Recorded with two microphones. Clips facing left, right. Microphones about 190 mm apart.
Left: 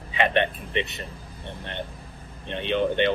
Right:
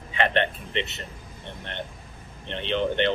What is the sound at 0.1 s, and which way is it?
Speech, 15° left (ahead or behind).